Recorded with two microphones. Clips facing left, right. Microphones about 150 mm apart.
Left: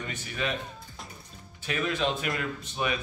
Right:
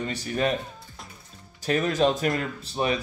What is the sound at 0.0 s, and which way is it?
Speech, 35° right (ahead or behind).